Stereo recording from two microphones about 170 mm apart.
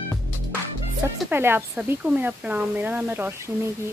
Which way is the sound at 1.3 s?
15° right (ahead or behind).